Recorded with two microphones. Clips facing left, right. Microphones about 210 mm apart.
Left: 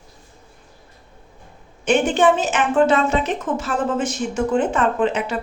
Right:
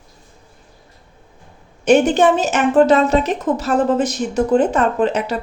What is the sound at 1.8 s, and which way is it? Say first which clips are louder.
A woman's voice: right 4 dB; 40° right (ahead or behind).